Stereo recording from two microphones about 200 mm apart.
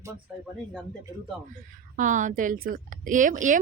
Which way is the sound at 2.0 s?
40° right (ahead or behind).